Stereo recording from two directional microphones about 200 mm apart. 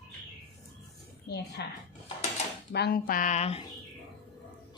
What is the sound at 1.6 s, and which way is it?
A woman's voice, 55° left (ahead or behind).